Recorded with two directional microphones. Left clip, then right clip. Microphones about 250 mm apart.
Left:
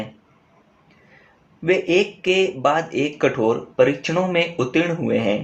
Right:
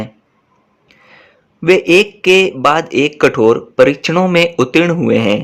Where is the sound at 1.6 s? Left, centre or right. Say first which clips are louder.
Right 9 dB; right.